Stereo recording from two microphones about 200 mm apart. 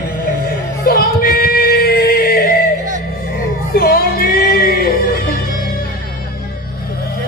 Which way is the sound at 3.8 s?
50° left (ahead or behind).